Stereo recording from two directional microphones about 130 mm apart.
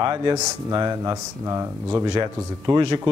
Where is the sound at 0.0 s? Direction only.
30° right (ahead or behind).